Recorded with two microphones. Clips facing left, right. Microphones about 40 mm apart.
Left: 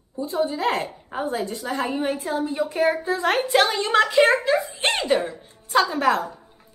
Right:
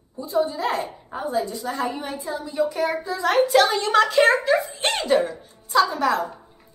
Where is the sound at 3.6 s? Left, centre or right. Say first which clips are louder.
Right 1 dB; left.